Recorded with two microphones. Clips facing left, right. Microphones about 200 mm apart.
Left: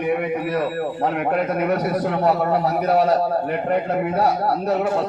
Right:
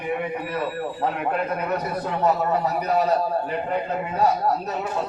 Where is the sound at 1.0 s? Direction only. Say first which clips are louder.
Left 4 dB; 70° left (ahead or behind).